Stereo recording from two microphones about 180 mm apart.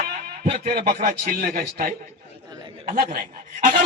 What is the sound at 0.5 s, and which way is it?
Speech, 50° right (ahead or behind).